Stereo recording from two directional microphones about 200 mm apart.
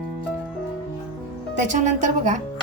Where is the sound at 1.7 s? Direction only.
35° right (ahead or behind).